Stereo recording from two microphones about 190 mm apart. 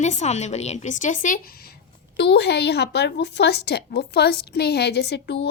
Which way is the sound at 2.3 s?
60° left (ahead or behind).